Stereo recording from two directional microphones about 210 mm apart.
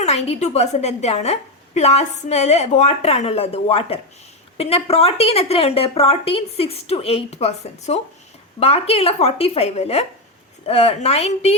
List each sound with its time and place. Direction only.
0.0 s a woman's voice: 30° left (ahead or behind)